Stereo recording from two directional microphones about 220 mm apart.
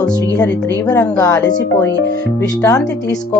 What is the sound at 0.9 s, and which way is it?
Speech, 15° left (ahead or behind).